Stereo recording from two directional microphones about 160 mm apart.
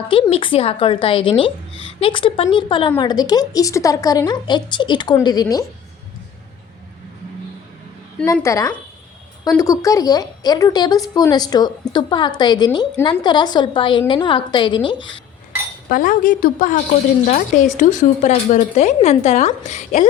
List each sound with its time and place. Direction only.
0.1 s a woman's voice: 35° left (ahead or behind)
8.2 s a woman's voice: 20° left (ahead or behind)
15.9 s a woman's voice: 55° left (ahead or behind)